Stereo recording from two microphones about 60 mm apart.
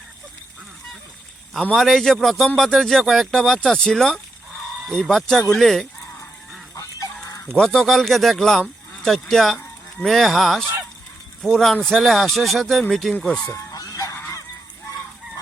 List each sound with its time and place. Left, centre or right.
1.7 s speech: centre
7.5 s speech: centre
11.9 s speech: centre
13.2 s speech: centre
13.5 s fowl: left